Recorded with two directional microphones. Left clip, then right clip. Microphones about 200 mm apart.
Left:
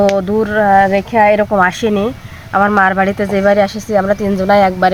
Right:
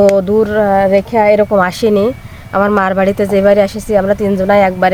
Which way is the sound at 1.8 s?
55° right (ahead or behind).